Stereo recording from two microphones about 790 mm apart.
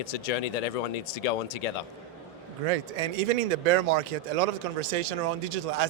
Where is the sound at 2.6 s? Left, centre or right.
Right.